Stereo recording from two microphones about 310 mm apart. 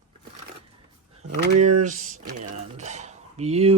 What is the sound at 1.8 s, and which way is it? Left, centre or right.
Speech, right.